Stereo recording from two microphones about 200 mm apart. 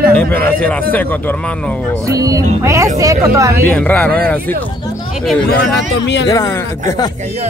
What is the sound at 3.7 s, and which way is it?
Speech, 5° left (ahead or behind).